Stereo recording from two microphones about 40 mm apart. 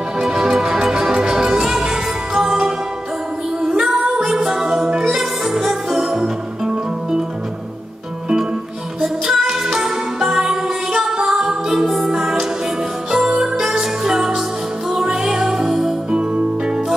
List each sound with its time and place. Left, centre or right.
0.3 s music: centre
4.4 s music: centre
9.0 s music: centre
16.1 s music: right